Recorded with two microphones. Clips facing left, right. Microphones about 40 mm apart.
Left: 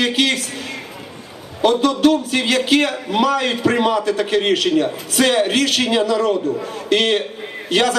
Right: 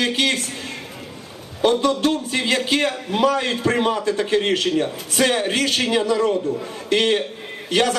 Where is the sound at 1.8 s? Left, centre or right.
Left.